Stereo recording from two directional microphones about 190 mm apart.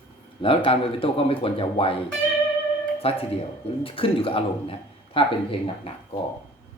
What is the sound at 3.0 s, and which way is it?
Speech, 30° left (ahead or behind).